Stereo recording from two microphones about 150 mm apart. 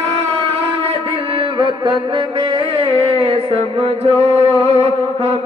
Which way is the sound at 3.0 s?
40° right (ahead or behind).